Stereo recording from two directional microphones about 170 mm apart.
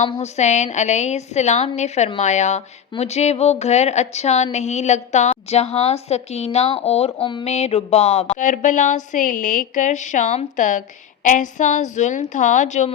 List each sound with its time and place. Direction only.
0.0 s a woman's voice: 40° left (ahead or behind)